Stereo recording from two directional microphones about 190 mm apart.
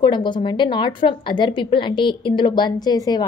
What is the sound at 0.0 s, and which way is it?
A woman's voice, 25° left (ahead or behind).